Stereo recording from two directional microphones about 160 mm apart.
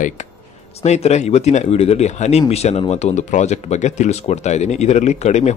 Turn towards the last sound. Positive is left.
turn(degrees=45)  # may be behind; listen again after turning